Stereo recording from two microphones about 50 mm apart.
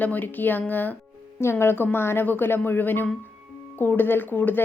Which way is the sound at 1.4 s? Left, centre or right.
Left.